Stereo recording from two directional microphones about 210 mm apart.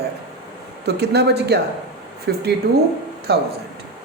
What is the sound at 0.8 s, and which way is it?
A woman's voice, 50° right (ahead or behind).